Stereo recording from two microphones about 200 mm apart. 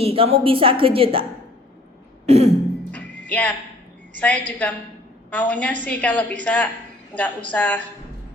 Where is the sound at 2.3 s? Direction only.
30° right (ahead or behind).